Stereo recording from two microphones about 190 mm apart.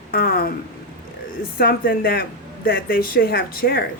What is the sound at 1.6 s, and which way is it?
Speech, 55° left (ahead or behind).